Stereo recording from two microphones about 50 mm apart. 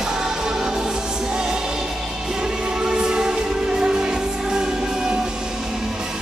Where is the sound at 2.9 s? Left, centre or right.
Centre.